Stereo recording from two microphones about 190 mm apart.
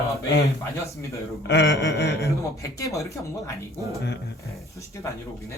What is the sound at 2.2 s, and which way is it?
Speech, 15° left (ahead or behind).